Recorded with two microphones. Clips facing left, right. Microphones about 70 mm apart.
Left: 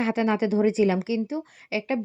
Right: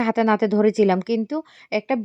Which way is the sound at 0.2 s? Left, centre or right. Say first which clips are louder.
Right 5 dB; right.